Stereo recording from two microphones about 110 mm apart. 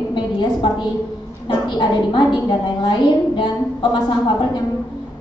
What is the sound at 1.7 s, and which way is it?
A woman's voice, 45° left (ahead or behind).